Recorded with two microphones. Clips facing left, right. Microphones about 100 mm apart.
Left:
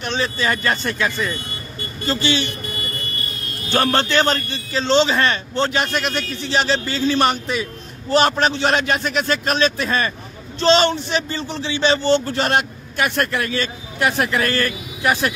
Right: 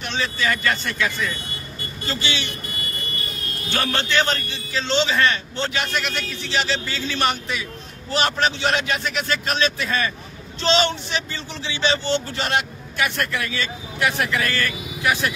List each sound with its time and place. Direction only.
0.0 s speech: 35° left (ahead or behind)
3.7 s speech: 40° left (ahead or behind)